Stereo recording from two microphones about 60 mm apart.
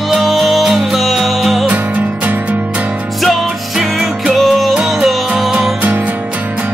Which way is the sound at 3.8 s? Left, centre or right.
Centre.